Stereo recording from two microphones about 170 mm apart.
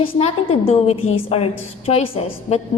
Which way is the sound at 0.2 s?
35° left (ahead or behind).